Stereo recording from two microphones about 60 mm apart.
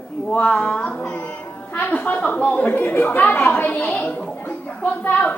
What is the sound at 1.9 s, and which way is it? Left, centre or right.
A woman's voice, left.